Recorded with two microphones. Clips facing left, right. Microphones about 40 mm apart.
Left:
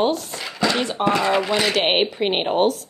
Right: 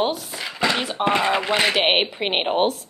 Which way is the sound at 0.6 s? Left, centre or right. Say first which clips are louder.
Left 1 dB; centre.